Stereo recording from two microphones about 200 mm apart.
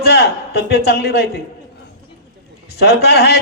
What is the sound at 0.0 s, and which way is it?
A man's voice, 55° left (ahead or behind).